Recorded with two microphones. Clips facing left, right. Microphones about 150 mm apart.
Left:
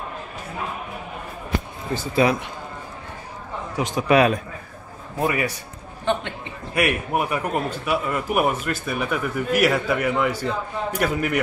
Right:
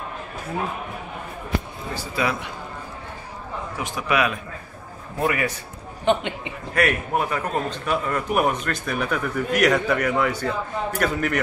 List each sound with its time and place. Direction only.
2.2 s a man's voice: 25° left (ahead or behind)
3.7 s a man's voice: 20° left (ahead or behind)
4.1 s a man's voice: 35° left (ahead or behind)
5.2 s a man's voice: 15° left (ahead or behind)
6.0 s a man's voice: 15° right (ahead or behind)
6.7 s a man's voice: 15° left (ahead or behind)